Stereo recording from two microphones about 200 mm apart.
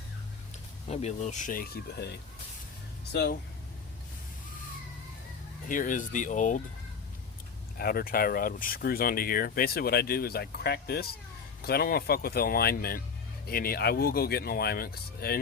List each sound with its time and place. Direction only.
0.9 s speech: 35° left (ahead or behind)
3.1 s speech: 55° left (ahead or behind)
5.6 s speech: 40° left (ahead or behind)
7.8 s speech: 50° left (ahead or behind)